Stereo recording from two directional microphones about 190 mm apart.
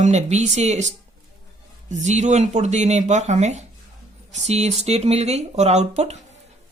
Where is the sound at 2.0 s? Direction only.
40° right (ahead or behind).